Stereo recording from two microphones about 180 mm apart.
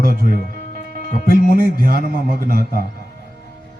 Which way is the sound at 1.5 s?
55° right (ahead or behind).